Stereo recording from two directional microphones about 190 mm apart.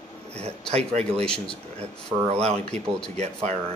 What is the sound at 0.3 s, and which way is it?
Speech, 35° right (ahead or behind).